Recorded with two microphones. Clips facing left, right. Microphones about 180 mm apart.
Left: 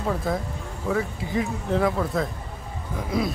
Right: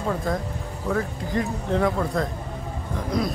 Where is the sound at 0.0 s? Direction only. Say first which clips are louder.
Even; 5° left (ahead or behind).